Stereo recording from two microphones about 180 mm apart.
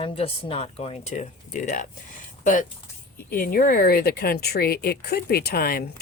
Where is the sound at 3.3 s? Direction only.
55° left (ahead or behind).